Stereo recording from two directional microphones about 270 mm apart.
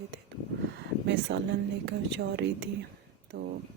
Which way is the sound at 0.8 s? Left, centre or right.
Right.